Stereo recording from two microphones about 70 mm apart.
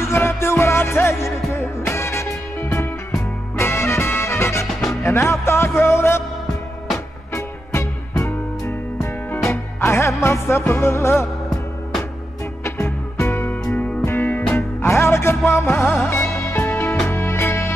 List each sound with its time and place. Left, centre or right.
0.0 s music: left
7.3 s music: left
12.6 s music: left
14.8 s music: left